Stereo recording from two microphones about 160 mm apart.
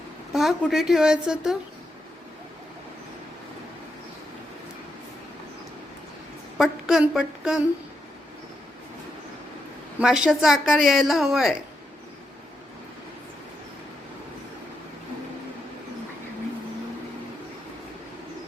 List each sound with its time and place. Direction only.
0.3 s a woman's voice: centre (ahead or behind)
6.6 s a woman's voice: 5° right (ahead or behind)
10.0 s a woman's voice: 5° right (ahead or behind)